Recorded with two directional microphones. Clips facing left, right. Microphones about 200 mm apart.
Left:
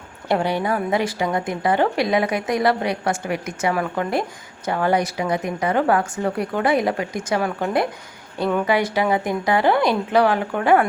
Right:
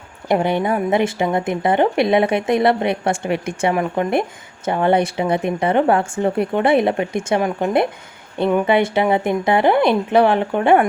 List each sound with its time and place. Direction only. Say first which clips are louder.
0.3 s a woman's voice: right 3 dB; 20° right (ahead or behind)